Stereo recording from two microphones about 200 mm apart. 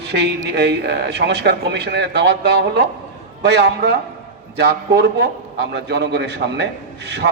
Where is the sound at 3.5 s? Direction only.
55° right (ahead or behind).